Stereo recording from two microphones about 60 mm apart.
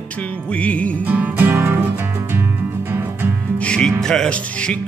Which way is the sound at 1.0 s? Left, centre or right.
Right.